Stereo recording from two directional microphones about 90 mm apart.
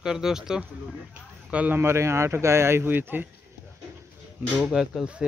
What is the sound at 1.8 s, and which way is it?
Speech, 30° right (ahead or behind).